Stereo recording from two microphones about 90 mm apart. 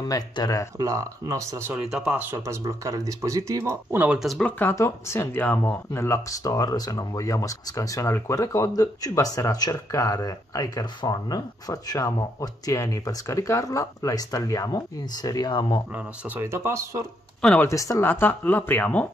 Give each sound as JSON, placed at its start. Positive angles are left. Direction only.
{"t": 0.1, "sound": "speech", "side_deg": 40}
{"t": 0.7, "sound": "speech", "side_deg": -35}
{"t": 1.7, "sound": "speech", "side_deg": -10}
{"t": 2.3, "sound": "speech", "side_deg": -35}
{"t": 3.9, "sound": "speech", "side_deg": -15}
{"t": 4.4, "sound": "speech", "side_deg": 20}
{"t": 4.7, "sound": "speech", "side_deg": 30}
{"t": 15.9, "sound": "speech", "side_deg": -30}
{"t": 17.6, "sound": "speech", "side_deg": 35}
{"t": 18.0, "sound": "speech", "side_deg": 25}